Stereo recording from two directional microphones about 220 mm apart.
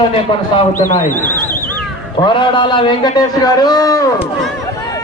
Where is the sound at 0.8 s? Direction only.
35° left (ahead or behind).